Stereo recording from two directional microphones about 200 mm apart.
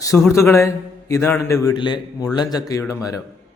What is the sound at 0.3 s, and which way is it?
Speech, 15° left (ahead or behind).